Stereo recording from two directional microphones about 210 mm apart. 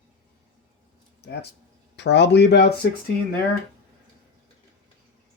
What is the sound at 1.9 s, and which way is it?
Speech, 55° left (ahead or behind).